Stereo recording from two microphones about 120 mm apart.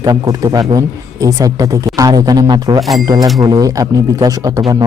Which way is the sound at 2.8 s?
Centre (ahead or behind).